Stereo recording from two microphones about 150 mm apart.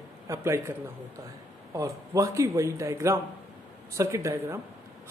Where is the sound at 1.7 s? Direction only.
20° right (ahead or behind).